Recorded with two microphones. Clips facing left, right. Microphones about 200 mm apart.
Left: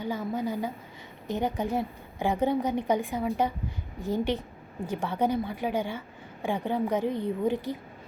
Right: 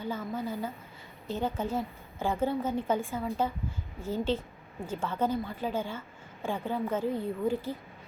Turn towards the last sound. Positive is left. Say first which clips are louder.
# left 3 dB
turn(degrees=20)  # may be behind; listen again after turning